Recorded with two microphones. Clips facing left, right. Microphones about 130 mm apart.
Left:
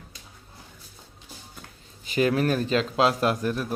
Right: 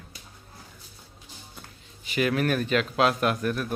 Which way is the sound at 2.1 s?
30° left (ahead or behind).